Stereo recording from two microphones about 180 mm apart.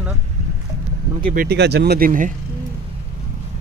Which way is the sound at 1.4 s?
65° right (ahead or behind).